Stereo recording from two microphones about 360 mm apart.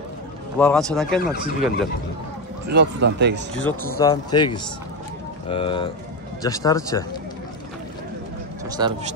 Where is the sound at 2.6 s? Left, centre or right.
Right.